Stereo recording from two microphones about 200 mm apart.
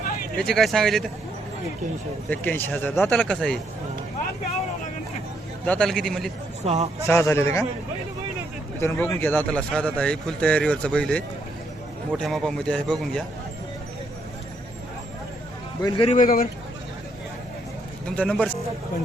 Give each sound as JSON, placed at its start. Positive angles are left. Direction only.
{"t": 0.3, "sound": "speech", "side_deg": 0}
{"t": 2.3, "sound": "speech", "side_deg": 10}
{"t": 5.6, "sound": "speech", "side_deg": 5}
{"t": 6.7, "sound": "a man's voice", "side_deg": -30}
{"t": 7.1, "sound": "speech", "side_deg": 15}
{"t": 8.8, "sound": "speech", "side_deg": 10}
{"t": 15.8, "sound": "a man's voice", "side_deg": 20}
{"t": 16.0, "sound": "speech", "side_deg": 40}
{"t": 18.2, "sound": "speech", "side_deg": 5}